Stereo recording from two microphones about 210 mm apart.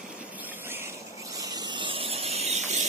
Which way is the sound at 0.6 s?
10° right (ahead or behind).